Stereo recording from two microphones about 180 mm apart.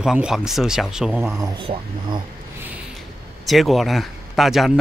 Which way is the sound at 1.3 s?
20° right (ahead or behind).